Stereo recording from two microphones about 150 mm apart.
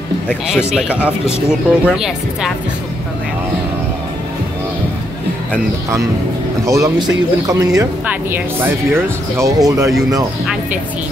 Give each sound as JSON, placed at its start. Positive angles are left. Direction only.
{"t": 0.7, "sound": "speech", "side_deg": -10}
{"t": 6.6, "sound": "speech", "side_deg": -20}
{"t": 8.9, "sound": "speech", "side_deg": -20}
{"t": 10.4, "sound": "speech", "side_deg": -5}